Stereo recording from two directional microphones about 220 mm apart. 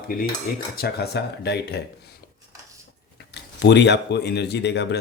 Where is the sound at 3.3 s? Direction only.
50° left (ahead or behind).